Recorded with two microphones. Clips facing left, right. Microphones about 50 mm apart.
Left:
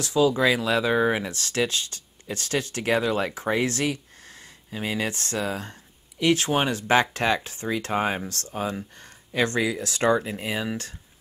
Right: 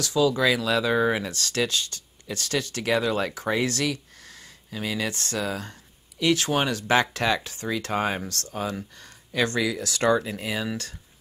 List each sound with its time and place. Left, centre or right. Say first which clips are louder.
0.0 s speech: left 1 dB; left